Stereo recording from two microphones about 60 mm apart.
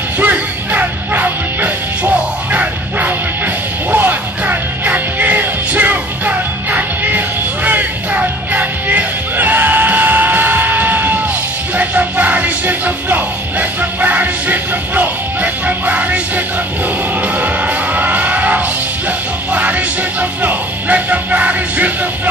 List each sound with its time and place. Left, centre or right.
0.2 s music: right
17.4 s music: right